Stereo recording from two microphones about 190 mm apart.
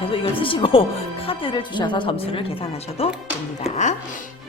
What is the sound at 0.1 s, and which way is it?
A woman's voice, 25° left (ahead or behind).